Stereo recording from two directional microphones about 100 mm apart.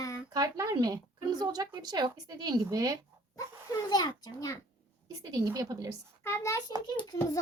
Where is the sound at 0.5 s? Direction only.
35° right (ahead or behind).